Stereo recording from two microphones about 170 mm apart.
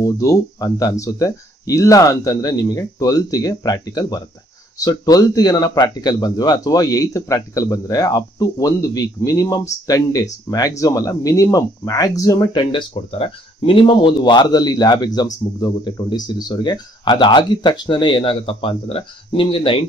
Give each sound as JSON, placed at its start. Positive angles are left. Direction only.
{"t": 0.0, "sound": "speech", "side_deg": 20}